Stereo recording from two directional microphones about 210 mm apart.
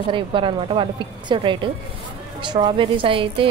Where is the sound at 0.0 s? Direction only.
25° right (ahead or behind).